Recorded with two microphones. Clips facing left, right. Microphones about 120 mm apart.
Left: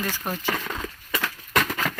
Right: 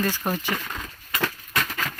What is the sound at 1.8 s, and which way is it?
Vehicle, 85° left.